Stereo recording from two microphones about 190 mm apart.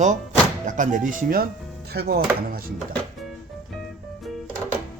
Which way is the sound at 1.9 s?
55° right (ahead or behind).